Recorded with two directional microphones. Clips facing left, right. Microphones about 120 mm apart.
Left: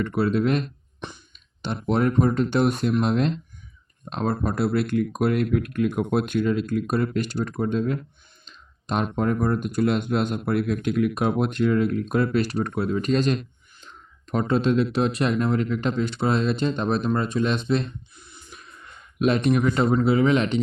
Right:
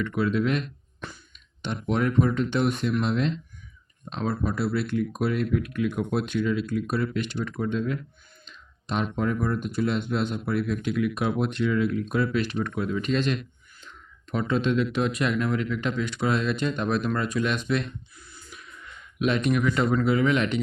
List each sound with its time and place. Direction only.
0.0 s speech: 40° left (ahead or behind); by 18.5 s 20° left (ahead or behind)
18.5 s a sound: 35° left (ahead or behind)
20.0 s speech: 30° left (ahead or behind)